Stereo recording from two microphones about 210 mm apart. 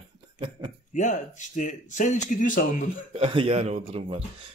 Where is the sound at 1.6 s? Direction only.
35° left (ahead or behind).